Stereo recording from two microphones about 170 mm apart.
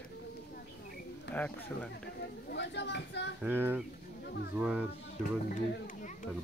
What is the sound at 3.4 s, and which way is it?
Speech, 10° right (ahead or behind).